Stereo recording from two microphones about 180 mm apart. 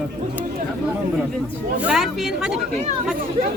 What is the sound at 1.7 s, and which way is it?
Speech, 5° right (ahead or behind).